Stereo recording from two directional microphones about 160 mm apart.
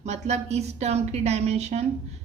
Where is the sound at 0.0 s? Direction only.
45° right (ahead or behind).